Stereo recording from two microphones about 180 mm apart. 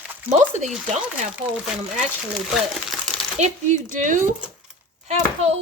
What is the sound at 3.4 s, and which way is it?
Speech, 40° right (ahead or behind).